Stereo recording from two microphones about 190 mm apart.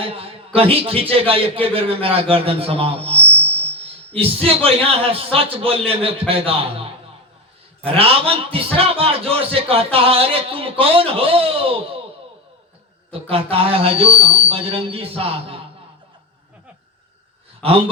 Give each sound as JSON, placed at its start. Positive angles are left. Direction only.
{"t": 0.0, "sound": "a man's voice", "side_deg": -30}
{"t": 7.9, "sound": "a man's voice", "side_deg": -30}
{"t": 13.3, "sound": "a man's voice", "side_deg": -30}
{"t": 17.6, "sound": "a man's voice", "side_deg": -30}